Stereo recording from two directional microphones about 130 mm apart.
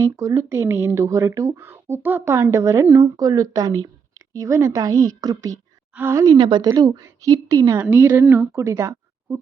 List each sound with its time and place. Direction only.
0.0 s speech: 25° right (ahead or behind)
6.0 s speech: 20° right (ahead or behind)
6.2 s speech: 35° right (ahead or behind)
7.9 s a woman's voice: 15° right (ahead or behind)